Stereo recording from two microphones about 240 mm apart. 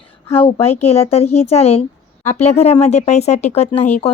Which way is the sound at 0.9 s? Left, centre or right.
Left.